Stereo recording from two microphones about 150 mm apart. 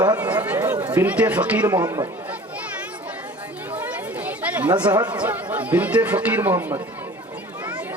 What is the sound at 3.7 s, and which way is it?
Speech, 10° right (ahead or behind).